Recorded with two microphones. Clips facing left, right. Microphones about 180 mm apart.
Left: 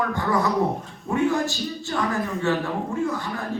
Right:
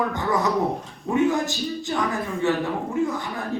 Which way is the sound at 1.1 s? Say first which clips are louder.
Right 1 dB; 20° right (ahead or behind).